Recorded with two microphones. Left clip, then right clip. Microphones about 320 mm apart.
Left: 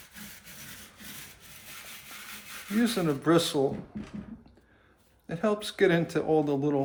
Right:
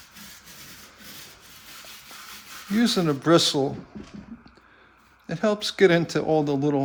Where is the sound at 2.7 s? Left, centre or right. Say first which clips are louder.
Right 5 dB; right.